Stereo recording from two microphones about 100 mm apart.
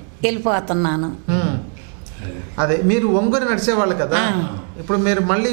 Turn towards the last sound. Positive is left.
turn(degrees=-15)  # may be behind; listen again after turning